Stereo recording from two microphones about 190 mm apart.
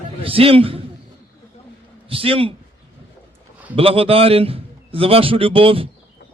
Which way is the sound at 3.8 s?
30° right (ahead or behind).